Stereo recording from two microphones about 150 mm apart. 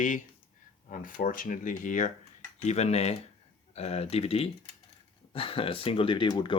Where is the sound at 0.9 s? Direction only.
65° left (ahead or behind).